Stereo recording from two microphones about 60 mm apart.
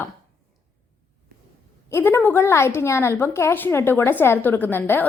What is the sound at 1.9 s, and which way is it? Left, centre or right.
A woman's voice, left.